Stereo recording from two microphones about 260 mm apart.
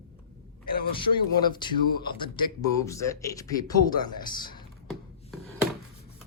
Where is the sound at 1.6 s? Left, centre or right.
Centre.